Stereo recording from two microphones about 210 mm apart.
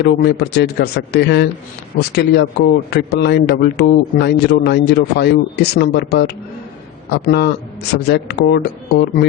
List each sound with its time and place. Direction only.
0.0 s a man's voice: 50° left (ahead or behind)